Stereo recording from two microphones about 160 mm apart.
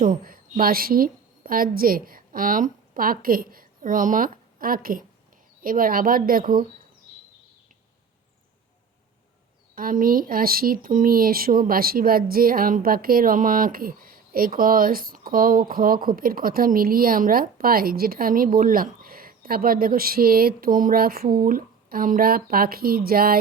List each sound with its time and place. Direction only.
0.0 s a woman's voice: 60° right (ahead or behind)
9.7 s speech: 60° right (ahead or behind)